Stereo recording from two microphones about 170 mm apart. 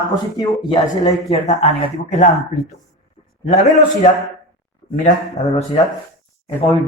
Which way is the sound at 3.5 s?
50° left (ahead or behind).